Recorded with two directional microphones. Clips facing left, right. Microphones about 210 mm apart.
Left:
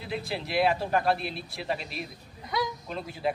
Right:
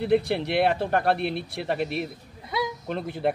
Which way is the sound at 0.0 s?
60° right (ahead or behind).